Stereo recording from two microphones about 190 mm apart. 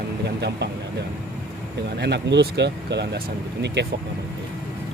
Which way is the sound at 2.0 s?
65° right (ahead or behind).